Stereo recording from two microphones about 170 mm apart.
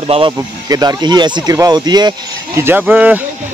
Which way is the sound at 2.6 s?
10° right (ahead or behind).